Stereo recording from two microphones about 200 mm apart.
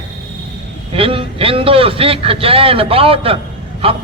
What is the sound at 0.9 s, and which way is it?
A man's voice, 25° right (ahead or behind).